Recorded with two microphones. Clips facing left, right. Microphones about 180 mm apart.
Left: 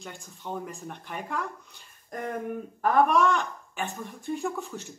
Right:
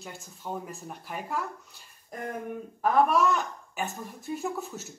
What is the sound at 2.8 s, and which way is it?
Speech, 5° right (ahead or behind).